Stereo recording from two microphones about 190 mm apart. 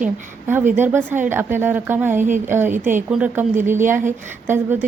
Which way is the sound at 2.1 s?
40° right (ahead or behind).